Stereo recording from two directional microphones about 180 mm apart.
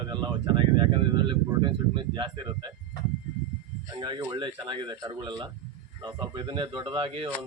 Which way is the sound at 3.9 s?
25° right (ahead or behind).